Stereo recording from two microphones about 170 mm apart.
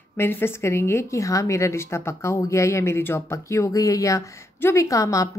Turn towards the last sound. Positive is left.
turn(degrees=20)  # may be behind; listen again after turning